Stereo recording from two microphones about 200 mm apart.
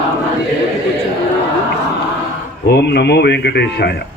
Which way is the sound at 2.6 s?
55° left (ahead or behind).